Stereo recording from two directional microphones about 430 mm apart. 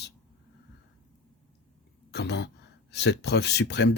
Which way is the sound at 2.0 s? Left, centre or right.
Left.